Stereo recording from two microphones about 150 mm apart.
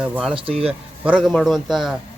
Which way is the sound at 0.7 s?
5° right (ahead or behind).